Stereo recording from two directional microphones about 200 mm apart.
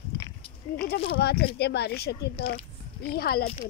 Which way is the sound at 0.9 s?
50° left (ahead or behind).